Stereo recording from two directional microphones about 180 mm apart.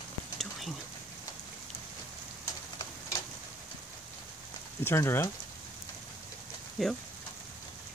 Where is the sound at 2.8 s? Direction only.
25° left (ahead or behind).